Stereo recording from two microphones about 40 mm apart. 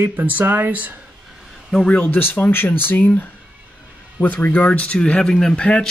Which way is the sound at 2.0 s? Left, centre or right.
Left.